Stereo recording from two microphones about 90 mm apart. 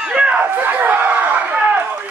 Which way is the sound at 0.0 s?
10° right (ahead or behind).